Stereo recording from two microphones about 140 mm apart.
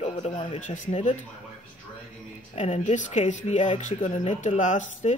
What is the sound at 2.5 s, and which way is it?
Speech, 55° left (ahead or behind).